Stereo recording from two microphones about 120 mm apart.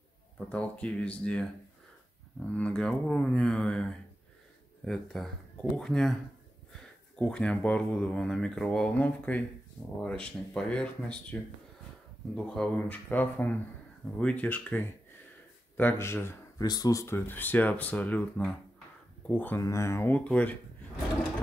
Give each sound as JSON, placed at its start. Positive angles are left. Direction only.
{"t": 0.5, "sound": "speech", "side_deg": 10}
{"t": 12.4, "sound": "speech", "side_deg": 5}
{"t": 15.8, "sound": "speech", "side_deg": 20}
{"t": 16.6, "sound": "speech", "side_deg": 35}